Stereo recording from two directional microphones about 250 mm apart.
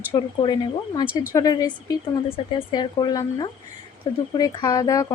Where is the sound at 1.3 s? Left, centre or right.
Centre.